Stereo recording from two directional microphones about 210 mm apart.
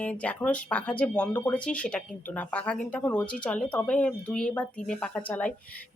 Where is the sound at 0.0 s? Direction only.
5° left (ahead or behind).